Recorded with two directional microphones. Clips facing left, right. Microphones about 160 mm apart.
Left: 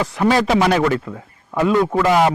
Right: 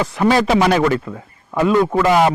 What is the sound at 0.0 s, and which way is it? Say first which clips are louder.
A man's voice: right 1 dB; 15° right (ahead or behind).